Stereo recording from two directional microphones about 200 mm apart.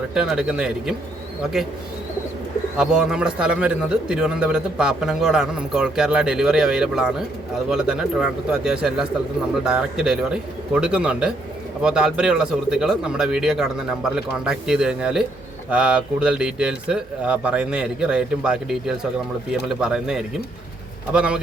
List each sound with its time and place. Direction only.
0.1 s speech: 5° right (ahead or behind)
2.7 s speech: 5° right (ahead or behind)